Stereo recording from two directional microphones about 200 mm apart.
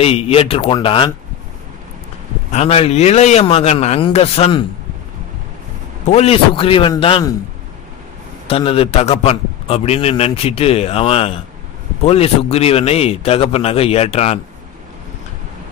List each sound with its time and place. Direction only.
0.0 s a man's voice: 30° left (ahead or behind)
2.5 s a man's voice: 30° left (ahead or behind)
6.0 s a man's voice: 30° left (ahead or behind)
8.5 s a man's voice: 30° left (ahead or behind)